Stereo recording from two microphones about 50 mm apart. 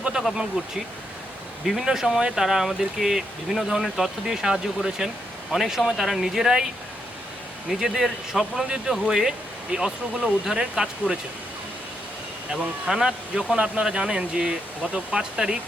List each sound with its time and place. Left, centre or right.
0.6 s speech: centre
1.6 s speech: centre
7.7 s speech: centre
12.8 s speech: centre